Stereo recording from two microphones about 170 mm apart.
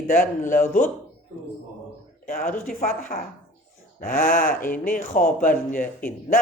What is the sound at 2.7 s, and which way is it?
Speech, 55° left (ahead or behind).